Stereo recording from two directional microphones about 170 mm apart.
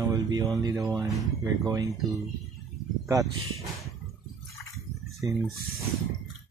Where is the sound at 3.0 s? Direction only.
20° right (ahead or behind).